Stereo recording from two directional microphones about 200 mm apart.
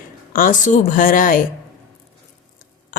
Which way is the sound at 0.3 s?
40° left (ahead or behind).